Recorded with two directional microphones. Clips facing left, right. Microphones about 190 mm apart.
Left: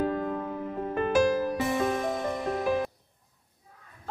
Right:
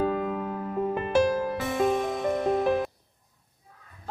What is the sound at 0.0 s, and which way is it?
Music, 90° right.